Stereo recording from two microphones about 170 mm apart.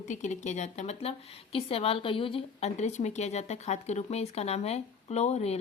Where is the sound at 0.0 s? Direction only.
45° left (ahead or behind).